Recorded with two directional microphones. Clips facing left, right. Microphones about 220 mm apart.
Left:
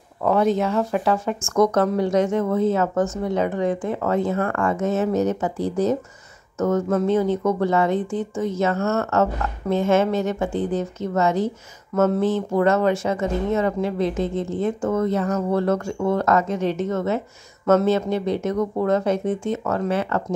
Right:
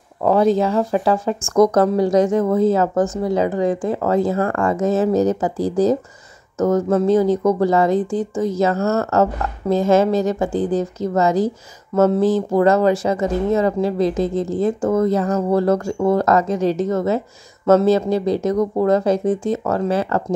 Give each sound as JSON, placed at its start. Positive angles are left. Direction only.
{"t": 0.2, "sound": "speech", "side_deg": -35}